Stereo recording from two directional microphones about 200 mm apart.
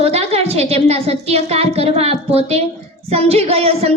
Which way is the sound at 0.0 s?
30° right (ahead or behind).